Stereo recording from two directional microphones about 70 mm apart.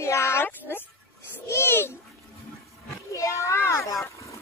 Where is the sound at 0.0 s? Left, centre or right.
Left.